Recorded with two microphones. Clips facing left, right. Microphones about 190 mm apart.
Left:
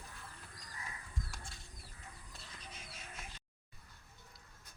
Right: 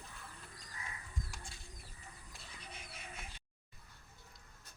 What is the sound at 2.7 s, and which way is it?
Bird, 60° right (ahead or behind).